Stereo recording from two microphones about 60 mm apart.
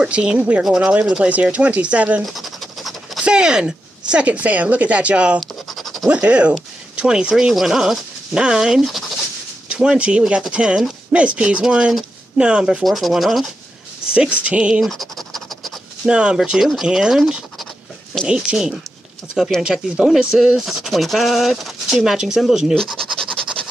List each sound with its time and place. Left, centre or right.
0.0 s speech: centre
2.2 s scratch: centre
3.3 s speech: centre
5.4 s scratch: centre
6.2 s speech: centre
12.8 s speech: centre
14.1 s speech: centre
14.8 s scratch: centre
16.1 s speech: centre
18.3 s speech: centre
22.9 s scratch: centre